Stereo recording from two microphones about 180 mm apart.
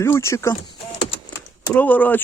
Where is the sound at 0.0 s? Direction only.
15° left (ahead or behind).